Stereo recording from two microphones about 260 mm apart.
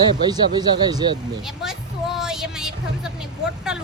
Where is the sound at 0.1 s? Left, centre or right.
Centre.